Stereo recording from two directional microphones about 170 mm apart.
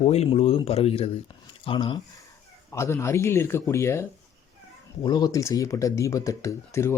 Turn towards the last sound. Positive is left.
turn(degrees=15)  # may be behind; listen again after turning